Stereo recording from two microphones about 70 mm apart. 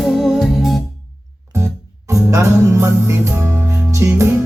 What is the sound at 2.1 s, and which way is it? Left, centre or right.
Music, right.